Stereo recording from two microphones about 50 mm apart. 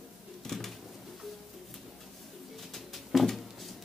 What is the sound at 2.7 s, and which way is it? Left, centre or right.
Music, centre.